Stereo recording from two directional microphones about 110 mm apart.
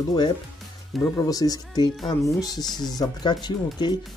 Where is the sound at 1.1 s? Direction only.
30° left (ahead or behind).